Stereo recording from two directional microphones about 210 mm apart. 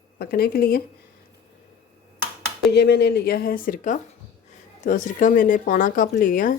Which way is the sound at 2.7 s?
50° left (ahead or behind).